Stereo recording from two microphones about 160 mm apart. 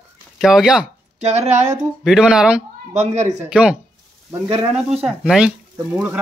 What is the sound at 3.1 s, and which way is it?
Speech, 45° right (ahead or behind).